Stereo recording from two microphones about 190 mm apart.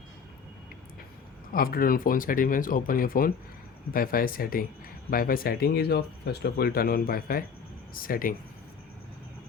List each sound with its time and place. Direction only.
1.5 s speech: 50° left (ahead or behind)